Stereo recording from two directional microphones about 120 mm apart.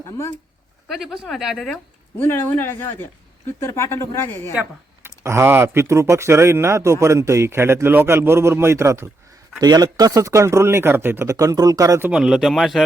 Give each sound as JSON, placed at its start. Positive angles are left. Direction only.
{"t": 0.9, "sound": "speech", "side_deg": 0}
{"t": 2.2, "sound": "speech", "side_deg": 20}
{"t": 5.0, "sound": "speech", "side_deg": -20}
{"t": 9.6, "sound": "speech", "side_deg": -35}
{"t": 12.0, "sound": "speech", "side_deg": -10}